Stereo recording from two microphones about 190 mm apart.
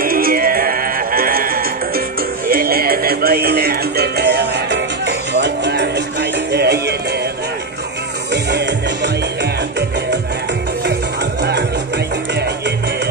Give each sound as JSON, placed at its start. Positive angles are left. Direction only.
{"t": 0.0, "sound": "music", "side_deg": -50}
{"t": 8.3, "sound": "music", "side_deg": -60}
{"t": 12.4, "sound": "music", "side_deg": -65}